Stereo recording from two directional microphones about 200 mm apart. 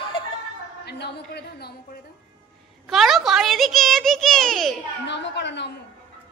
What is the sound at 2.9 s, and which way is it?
A woman's voice, centre (ahead or behind).